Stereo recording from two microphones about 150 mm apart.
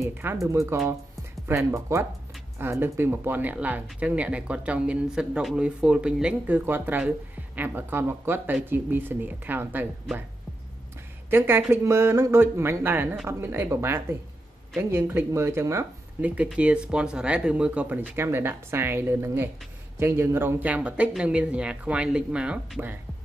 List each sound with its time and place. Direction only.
0.0 s speech: 15° right (ahead or behind)
11.2 s a woman's voice: 15° right (ahead or behind)